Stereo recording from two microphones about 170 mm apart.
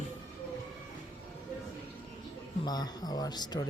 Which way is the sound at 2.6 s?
25° left (ahead or behind).